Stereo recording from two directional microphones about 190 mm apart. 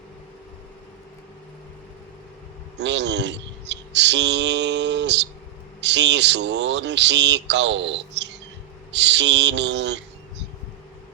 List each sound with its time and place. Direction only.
2.7 s speech: 65° right (ahead or behind)